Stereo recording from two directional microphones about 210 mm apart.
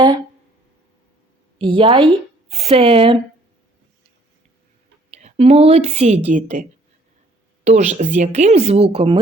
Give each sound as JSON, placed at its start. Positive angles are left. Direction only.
{"t": 1.5, "sound": "speech", "side_deg": -25}
{"t": 5.1, "sound": "a woman's voice", "side_deg": -30}